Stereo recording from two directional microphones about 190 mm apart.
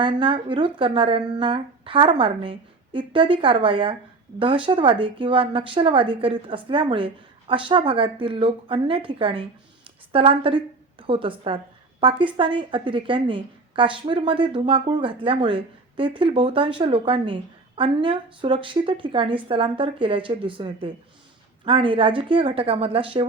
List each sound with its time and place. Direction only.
0.0 s a woman's voice: 25° right (ahead or behind)